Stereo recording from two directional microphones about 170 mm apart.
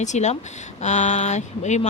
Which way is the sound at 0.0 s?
45° left (ahead or behind).